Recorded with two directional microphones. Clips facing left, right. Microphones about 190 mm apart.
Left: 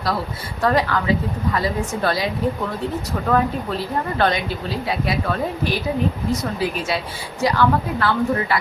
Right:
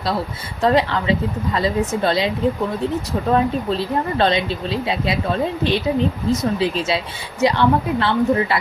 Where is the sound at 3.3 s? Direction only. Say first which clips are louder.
Right 2 dB; 25° right (ahead or behind).